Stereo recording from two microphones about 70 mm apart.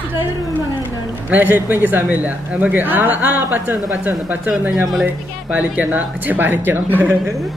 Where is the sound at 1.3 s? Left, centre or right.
Right.